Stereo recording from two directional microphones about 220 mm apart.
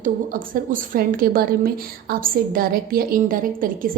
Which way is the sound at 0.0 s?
40° right (ahead or behind).